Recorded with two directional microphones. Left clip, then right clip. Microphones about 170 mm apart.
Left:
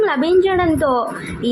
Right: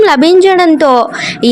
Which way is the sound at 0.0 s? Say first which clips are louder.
Right 9 dB; 40° right (ahead or behind).